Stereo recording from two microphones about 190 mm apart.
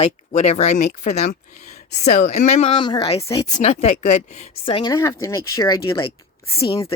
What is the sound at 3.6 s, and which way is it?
A woman's voice, 35° left (ahead or behind).